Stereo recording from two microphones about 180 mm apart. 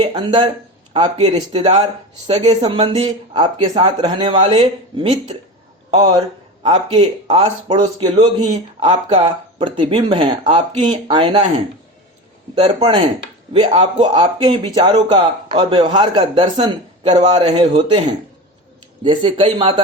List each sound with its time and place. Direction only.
0.0 s speech: 25° right (ahead or behind)
1.2 s speech: 35° right (ahead or behind)
2.6 s a man's voice: 25° right (ahead or behind)
12.5 s a man's voice: 30° right (ahead or behind)
19.0 s a man's voice: 30° right (ahead or behind)